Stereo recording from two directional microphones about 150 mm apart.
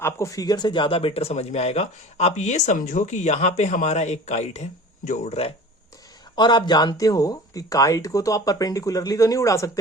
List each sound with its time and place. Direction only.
0.0 s speech: 20° left (ahead or behind); by 5.5 s 45° left (ahead or behind)
6.3 s speech: 30° left (ahead or behind)